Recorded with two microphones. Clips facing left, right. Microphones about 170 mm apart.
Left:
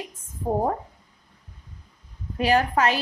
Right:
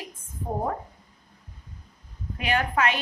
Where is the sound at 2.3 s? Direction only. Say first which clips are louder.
Left 5 dB; 35° left (ahead or behind).